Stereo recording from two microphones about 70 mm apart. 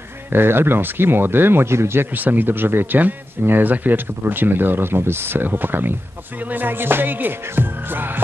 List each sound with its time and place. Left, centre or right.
0.3 s speech: right
2.1 s speech: right